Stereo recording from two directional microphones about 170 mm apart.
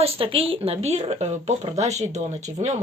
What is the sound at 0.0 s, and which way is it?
Speech, 35° right (ahead or behind).